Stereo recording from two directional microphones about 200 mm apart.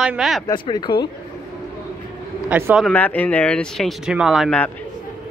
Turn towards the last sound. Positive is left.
turn(degrees=0)  # may be behind; listen again after turning